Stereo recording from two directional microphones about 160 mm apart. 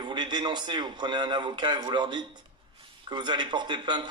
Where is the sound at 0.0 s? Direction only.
30° right (ahead or behind).